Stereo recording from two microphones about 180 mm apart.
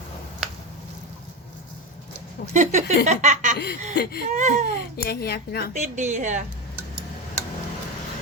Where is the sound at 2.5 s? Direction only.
40° right (ahead or behind).